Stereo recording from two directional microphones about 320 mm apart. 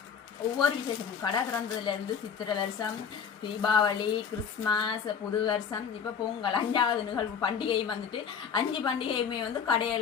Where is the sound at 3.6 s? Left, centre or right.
Centre.